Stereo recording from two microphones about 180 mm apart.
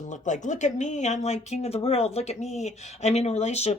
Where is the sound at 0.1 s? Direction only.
45° left (ahead or behind).